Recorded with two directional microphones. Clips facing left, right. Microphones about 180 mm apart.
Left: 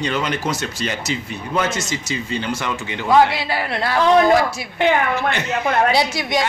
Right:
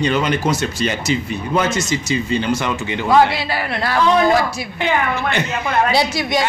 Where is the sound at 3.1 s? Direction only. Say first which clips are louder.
Even; 15° left (ahead or behind).